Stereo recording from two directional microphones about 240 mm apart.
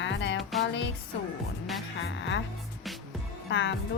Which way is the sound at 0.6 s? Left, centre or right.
Left.